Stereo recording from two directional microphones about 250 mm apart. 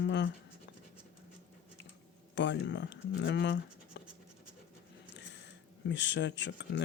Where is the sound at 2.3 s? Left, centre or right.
Left.